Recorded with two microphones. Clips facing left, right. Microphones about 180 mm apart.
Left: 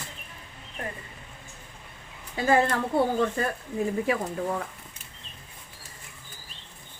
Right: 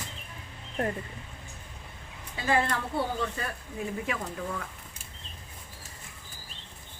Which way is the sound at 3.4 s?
45° left (ahead or behind).